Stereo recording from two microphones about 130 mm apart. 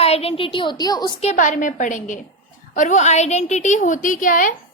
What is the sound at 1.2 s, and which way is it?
A woman's voice, 70° left (ahead or behind).